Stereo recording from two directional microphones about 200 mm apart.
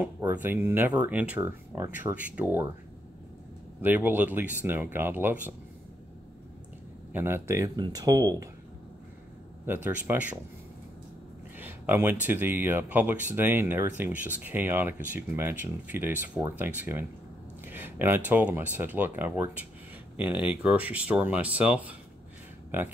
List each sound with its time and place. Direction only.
0.0 s speech: 10° right (ahead or behind)
3.8 s speech: 10° right (ahead or behind)
7.1 s speech: 10° right (ahead or behind)
9.7 s speech: 10° right (ahead or behind)
11.5 s speech: 10° right (ahead or behind)